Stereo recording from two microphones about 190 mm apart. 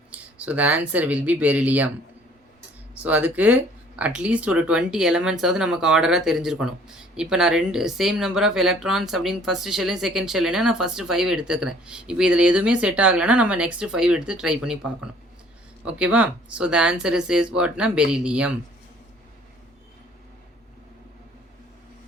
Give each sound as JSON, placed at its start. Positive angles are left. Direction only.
{"t": 0.1, "sound": "speech", "side_deg": -10}
{"t": 3.0, "sound": "speech", "side_deg": -10}